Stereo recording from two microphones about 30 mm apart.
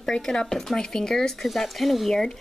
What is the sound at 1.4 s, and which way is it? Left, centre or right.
Speech, centre.